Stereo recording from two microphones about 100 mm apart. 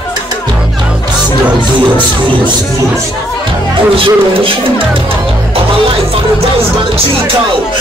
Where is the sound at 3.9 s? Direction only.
65° right (ahead or behind).